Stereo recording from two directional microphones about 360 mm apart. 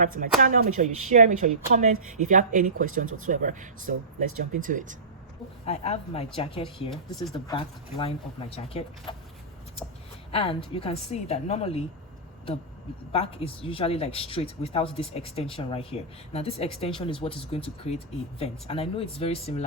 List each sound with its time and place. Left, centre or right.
0.0 s speech: right
5.6 s speech: centre
6.9 s speech: centre
10.3 s speech: centre
13.1 s speech: centre